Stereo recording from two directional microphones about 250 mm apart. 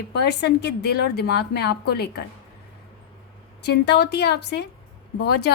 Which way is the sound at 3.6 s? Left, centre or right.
Left.